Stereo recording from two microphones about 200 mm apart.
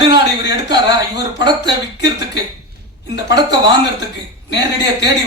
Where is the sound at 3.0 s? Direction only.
60° left (ahead or behind).